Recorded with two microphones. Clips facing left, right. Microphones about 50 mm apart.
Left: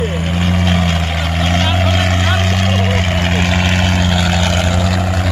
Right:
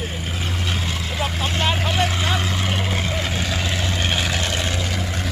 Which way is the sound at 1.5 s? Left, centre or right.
Left.